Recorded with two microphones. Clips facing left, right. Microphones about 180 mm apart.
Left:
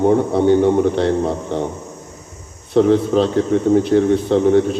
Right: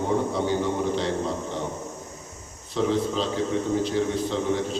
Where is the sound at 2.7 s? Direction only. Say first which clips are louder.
Left 11 dB; 60° left (ahead or behind).